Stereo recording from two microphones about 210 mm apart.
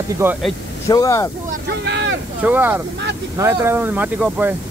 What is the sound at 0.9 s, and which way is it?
Speech, 15° left (ahead or behind).